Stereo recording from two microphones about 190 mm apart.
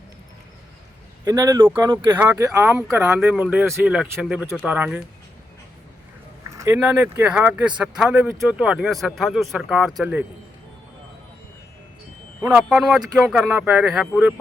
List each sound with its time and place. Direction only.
1.2 s speech: 20° right (ahead or behind)
6.8 s speech: 10° right (ahead or behind)
12.4 s speech: 10° right (ahead or behind)